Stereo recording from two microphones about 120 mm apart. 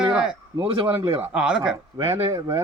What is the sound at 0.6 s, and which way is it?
Speech, 50° right (ahead or behind).